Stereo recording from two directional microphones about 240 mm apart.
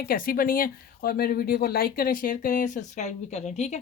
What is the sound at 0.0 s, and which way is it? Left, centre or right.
Speech, left.